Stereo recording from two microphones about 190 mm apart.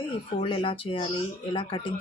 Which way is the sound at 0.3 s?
30° left (ahead or behind).